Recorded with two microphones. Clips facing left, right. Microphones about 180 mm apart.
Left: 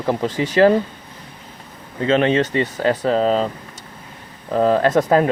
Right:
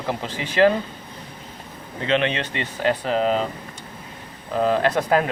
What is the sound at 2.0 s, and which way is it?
Speech, 40° left (ahead or behind).